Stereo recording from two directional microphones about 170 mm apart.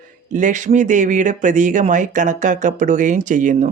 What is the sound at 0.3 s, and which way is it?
Speech, 45° right (ahead or behind).